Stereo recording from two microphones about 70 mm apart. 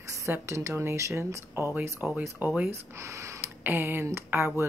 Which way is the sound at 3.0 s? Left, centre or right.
Right.